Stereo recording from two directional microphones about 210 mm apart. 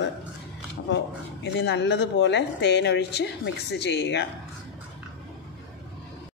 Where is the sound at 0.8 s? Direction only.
55° left (ahead or behind).